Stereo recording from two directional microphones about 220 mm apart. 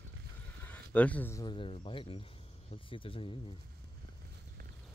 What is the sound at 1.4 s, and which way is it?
Speech, 25° left (ahead or behind).